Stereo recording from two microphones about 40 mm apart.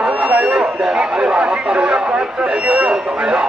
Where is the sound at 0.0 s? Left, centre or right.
Right.